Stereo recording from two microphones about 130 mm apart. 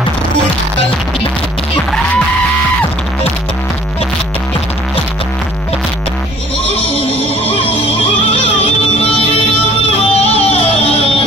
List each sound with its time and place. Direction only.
9.9 s music: 50° left (ahead or behind)